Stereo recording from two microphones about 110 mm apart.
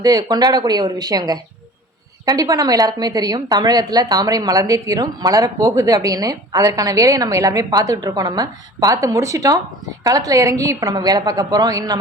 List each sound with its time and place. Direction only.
0.0 s a woman's voice: 35° right (ahead or behind)